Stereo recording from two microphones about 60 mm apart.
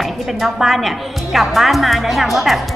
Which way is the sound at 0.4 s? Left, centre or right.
Centre.